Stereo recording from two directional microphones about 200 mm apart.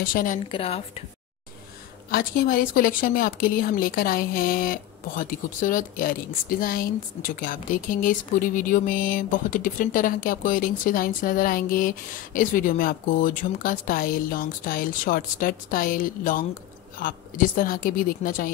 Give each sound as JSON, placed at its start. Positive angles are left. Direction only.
{"t": 0.0, "sound": "a woman's voice", "side_deg": 45}
{"t": 0.5, "sound": "a woman's voice", "side_deg": 30}
{"t": 2.0, "sound": "a woman's voice", "side_deg": 45}